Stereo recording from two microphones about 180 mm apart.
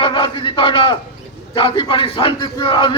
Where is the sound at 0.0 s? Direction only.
25° left (ahead or behind).